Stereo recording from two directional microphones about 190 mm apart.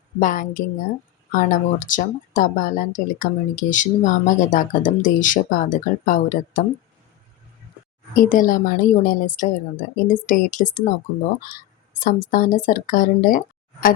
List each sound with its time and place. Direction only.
0.2 s speech: 45° left (ahead or behind)
8.1 s speech: 45° left (ahead or behind)
11.9 s speech: 45° left (ahead or behind)